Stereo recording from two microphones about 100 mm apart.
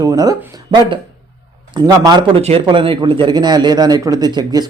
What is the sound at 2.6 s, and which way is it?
A man's voice, 60° right (ahead or behind).